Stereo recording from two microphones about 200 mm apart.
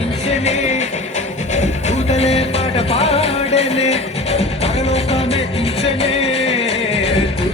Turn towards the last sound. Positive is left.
turn(degrees=30)  # may be behind; listen again after turning